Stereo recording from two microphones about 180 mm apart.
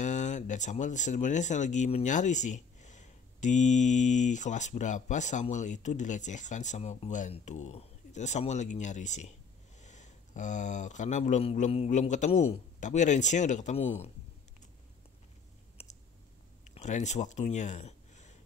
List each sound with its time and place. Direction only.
0.0 s speech: 45° left (ahead or behind)
15.8 s clicking: 30° left (ahead or behind)
16.6 s speech: 40° left (ahead or behind)